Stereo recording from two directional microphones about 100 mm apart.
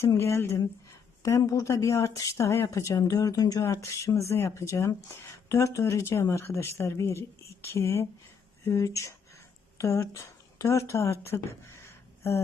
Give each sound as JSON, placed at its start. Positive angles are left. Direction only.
{"t": 0.2, "sound": "speech", "side_deg": 25}